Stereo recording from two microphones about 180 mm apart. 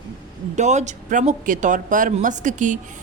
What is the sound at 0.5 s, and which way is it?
A woman's voice, 40° right (ahead or behind).